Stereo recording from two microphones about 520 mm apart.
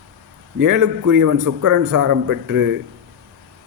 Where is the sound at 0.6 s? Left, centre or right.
Right.